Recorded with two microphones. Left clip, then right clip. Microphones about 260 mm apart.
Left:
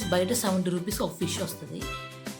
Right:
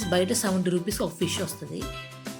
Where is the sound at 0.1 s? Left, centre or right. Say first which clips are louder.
Right 1 dB; centre.